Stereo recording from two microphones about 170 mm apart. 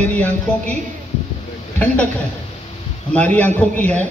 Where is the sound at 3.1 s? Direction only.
10° left (ahead or behind).